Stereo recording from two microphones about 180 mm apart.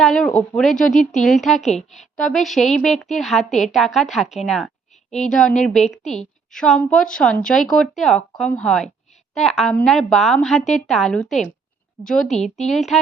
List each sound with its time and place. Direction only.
0.0 s speech: 5° left (ahead or behind)
1.7 s a woman's voice: 40° left (ahead or behind)
2.1 s speech: centre (ahead or behind)